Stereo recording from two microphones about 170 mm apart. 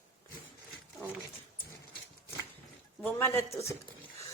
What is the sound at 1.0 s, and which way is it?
Speech, 5° left (ahead or behind).